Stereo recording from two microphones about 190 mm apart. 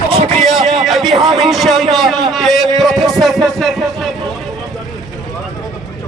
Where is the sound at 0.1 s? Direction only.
30° right (ahead or behind).